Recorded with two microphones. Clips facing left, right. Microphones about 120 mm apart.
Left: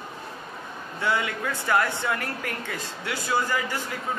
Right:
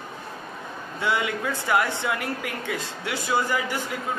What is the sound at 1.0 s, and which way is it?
Speech, 20° right (ahead or behind).